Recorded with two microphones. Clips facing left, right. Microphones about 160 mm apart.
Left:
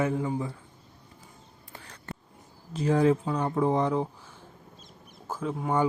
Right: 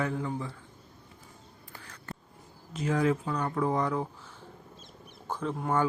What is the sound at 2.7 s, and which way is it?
Speech, 30° left (ahead or behind).